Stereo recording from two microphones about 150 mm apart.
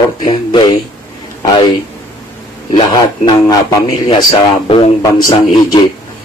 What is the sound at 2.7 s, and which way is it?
A man's voice, 30° left (ahead or behind).